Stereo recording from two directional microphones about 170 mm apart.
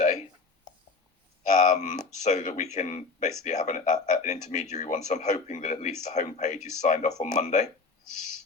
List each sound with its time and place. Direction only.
1.5 s speech: 45° left (ahead or behind)